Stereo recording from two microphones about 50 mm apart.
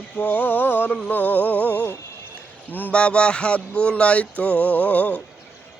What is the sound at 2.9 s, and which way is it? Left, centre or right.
Music, left.